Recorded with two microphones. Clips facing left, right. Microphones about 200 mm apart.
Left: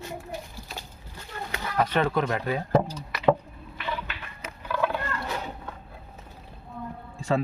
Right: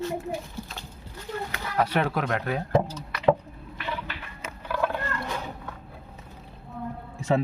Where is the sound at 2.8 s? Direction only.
10° left (ahead or behind).